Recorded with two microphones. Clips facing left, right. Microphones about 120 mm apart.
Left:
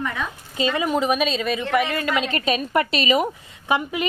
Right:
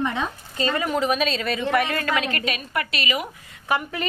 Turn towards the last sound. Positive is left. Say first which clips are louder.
# left 2 dB
turn(degrees=15)  # may be behind; listen again after turning